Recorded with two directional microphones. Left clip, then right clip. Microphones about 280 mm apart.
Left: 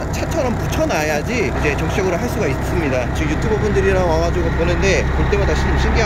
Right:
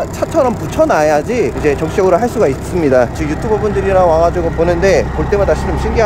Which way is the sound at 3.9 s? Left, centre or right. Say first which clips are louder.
Right 11 dB; centre.